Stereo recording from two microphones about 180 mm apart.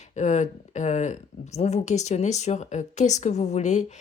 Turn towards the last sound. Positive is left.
turn(degrees=40)  # may be behind; listen again after turning